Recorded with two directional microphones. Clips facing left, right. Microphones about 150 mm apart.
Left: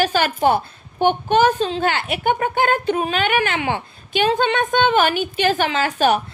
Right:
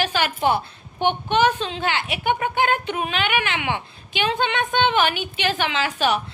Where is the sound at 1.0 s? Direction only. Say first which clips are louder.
Left 4 dB; 45° left (ahead or behind).